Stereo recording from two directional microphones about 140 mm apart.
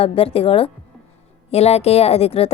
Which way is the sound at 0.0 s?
45° left (ahead or behind).